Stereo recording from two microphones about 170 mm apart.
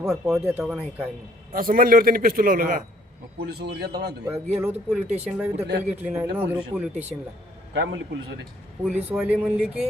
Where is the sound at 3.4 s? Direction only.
70° right (ahead or behind).